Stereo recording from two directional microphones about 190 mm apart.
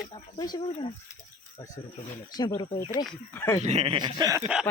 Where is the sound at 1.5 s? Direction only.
15° left (ahead or behind).